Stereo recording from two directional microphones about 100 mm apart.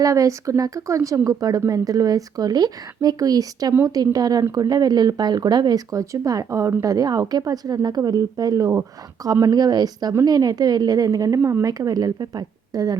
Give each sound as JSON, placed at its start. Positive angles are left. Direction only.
{"t": 0.0, "sound": "speech", "side_deg": -35}